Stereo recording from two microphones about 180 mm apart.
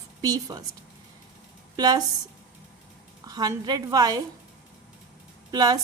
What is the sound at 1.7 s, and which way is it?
Speech, 20° right (ahead or behind).